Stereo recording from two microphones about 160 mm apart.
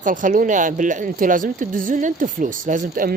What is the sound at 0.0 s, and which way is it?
Speech, 55° right (ahead or behind).